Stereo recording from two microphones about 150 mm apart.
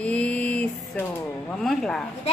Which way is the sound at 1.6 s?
5° left (ahead or behind).